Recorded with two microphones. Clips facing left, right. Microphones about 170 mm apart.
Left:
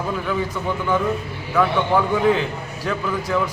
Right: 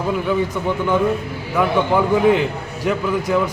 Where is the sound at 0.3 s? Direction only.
20° right (ahead or behind).